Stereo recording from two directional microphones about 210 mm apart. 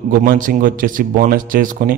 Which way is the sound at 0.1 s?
45° right (ahead or behind).